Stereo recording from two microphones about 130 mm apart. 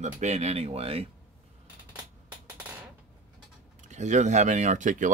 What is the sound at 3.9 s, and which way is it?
Speech, 65° right (ahead or behind).